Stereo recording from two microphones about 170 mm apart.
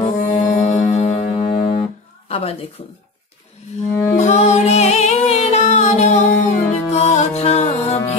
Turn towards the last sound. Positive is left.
turn(degrees=40)  # may be behind; listen again after turning